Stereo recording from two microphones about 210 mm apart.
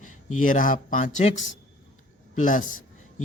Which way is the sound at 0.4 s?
40° left (ahead or behind).